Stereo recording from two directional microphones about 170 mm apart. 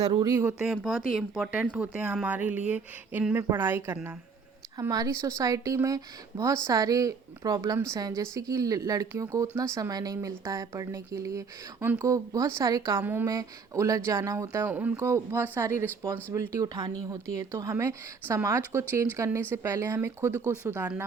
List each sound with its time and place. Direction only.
0.0 s a woman's voice: 25° right (ahead or behind)
0.6 s a woman's voice: 5° right (ahead or behind)